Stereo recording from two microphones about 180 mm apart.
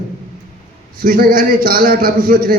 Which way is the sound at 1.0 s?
55° right (ahead or behind).